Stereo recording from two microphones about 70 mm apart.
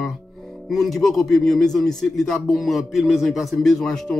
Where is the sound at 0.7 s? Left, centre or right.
Centre.